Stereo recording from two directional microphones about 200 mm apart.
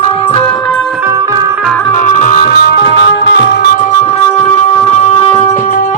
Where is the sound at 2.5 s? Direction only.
55° left (ahead or behind).